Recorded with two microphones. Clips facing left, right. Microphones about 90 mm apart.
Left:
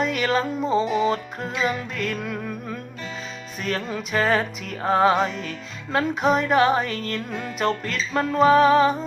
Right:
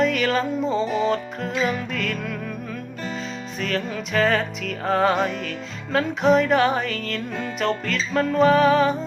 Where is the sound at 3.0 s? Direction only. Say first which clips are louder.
Right 4 dB; 35° right (ahead or behind).